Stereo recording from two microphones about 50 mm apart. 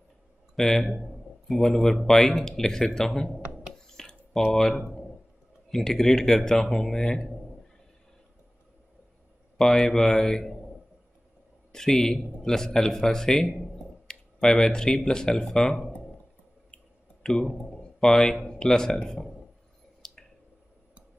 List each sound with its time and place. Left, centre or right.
0.6 s a man's voice: centre
3.7 s a sound: centre
4.5 s a man's voice: centre
9.6 s a man's voice: centre
11.7 s a man's voice: centre
14.0 s a sound: centre
15.0 s a man's voice: centre
16.7 s a sound: centre
18.3 s a man's voice: centre
20.0 s squish: centre